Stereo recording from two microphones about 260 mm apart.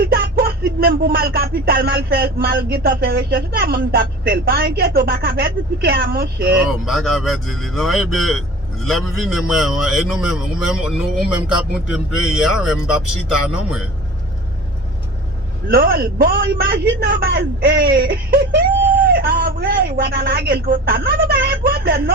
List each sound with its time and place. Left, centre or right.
0.0 s speech: right
6.7 s a man's voice: centre
15.7 s speech: right